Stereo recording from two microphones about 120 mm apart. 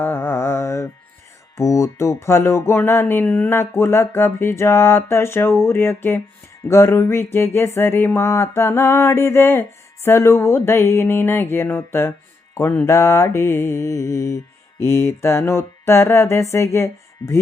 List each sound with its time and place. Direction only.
0.0 s mantra: 20° left (ahead or behind)
1.5 s music: 25° left (ahead or behind)
3.6 s music: 20° left (ahead or behind)